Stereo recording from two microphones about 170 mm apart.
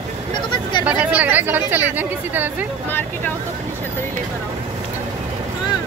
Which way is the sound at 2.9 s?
10° left (ahead or behind).